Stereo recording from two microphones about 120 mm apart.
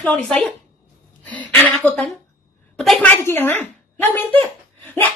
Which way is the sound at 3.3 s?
15° left (ahead or behind).